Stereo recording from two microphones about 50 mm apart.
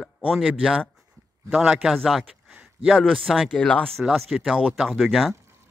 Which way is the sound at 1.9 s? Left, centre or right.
Centre.